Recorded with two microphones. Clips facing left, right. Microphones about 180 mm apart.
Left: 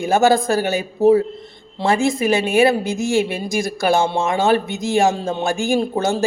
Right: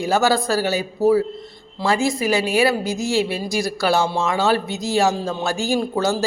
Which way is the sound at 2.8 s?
55° left (ahead or behind).